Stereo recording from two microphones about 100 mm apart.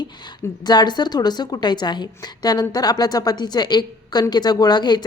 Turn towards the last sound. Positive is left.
turn(degrees=45)  # may be behind; listen again after turning